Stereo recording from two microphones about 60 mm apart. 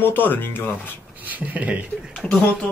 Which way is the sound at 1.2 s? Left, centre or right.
Right.